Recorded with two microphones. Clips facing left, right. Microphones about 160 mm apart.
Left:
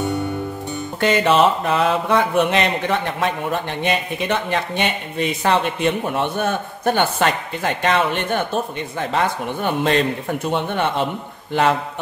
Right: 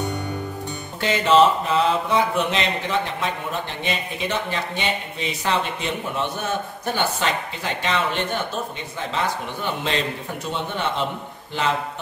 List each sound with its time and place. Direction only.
1.0 s a man's voice: 60° left (ahead or behind)